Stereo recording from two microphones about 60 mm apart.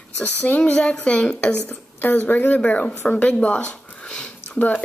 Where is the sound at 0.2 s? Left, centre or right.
Left.